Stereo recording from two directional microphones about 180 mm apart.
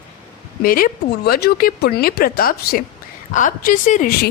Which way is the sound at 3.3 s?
45° left (ahead or behind).